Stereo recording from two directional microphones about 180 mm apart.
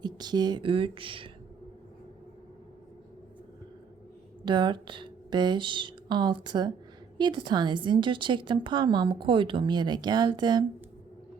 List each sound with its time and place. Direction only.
0.0 s a woman's voice: 25° right (ahead or behind)
4.4 s a woman's voice: 25° right (ahead or behind)